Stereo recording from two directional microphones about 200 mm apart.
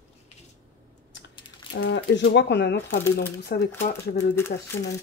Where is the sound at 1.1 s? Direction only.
65° left (ahead or behind).